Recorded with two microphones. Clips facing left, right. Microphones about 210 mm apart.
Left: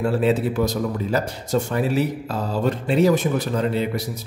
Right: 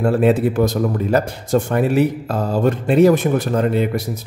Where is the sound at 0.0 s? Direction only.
50° right (ahead or behind).